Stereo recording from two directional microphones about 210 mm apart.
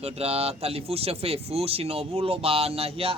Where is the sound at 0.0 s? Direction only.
30° right (ahead or behind).